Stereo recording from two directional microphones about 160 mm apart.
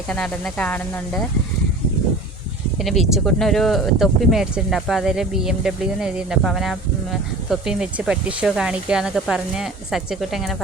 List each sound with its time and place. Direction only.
0.1 s speech: 5° left (ahead or behind)
2.7 s speech: centre (ahead or behind)